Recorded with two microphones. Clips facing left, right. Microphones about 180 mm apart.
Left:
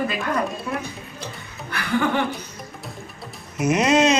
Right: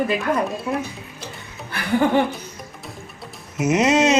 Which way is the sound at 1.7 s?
30° right (ahead or behind).